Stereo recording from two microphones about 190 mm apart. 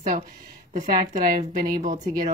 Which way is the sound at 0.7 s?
40° right (ahead or behind).